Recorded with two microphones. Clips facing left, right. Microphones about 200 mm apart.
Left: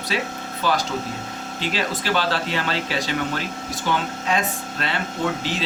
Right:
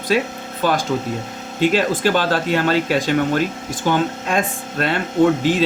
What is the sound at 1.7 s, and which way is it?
Speech, 45° right (ahead or behind).